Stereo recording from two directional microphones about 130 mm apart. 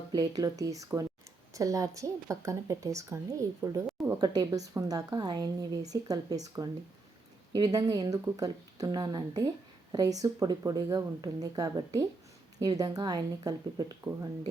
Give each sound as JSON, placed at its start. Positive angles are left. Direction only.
{"t": 0.1, "sound": "a woman's voice", "side_deg": -30}